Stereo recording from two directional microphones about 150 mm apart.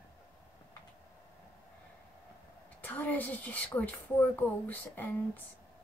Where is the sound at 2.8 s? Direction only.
10° left (ahead or behind).